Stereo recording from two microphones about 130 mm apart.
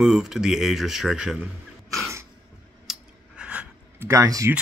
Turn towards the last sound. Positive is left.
turn(degrees=-25)  # may be behind; listen again after turning